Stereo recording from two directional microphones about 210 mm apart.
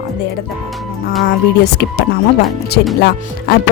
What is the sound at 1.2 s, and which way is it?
A woman's voice, 50° left (ahead or behind).